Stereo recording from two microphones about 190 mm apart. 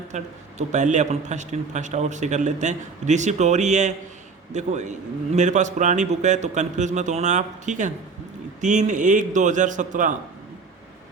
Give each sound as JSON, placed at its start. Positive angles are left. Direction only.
{"t": 0.1, "sound": "a man's voice", "side_deg": -35}